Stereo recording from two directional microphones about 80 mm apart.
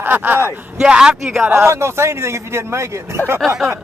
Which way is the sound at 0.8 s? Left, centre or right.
Centre.